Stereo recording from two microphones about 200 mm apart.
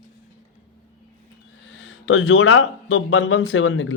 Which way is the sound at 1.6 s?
65° left (ahead or behind).